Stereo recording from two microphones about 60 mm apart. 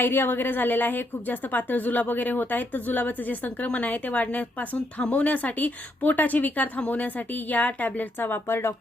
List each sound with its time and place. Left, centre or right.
0.0 s a woman's voice: left